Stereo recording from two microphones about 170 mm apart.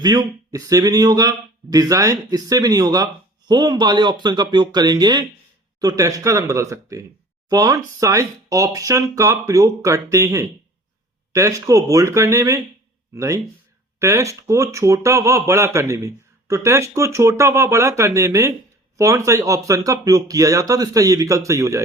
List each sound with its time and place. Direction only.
0.0 s speech: 25° right (ahead or behind)